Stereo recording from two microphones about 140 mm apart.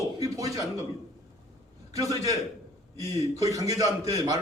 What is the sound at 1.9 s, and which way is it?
A man's voice, 25° right (ahead or behind).